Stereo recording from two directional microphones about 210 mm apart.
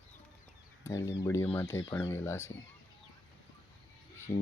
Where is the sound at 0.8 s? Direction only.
15° left (ahead or behind).